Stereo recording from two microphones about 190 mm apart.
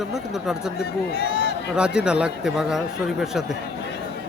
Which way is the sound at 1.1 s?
60° left (ahead or behind).